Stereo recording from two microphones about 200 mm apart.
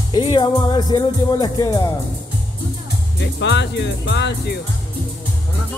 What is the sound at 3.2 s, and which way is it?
Speech, 60° left (ahead or behind).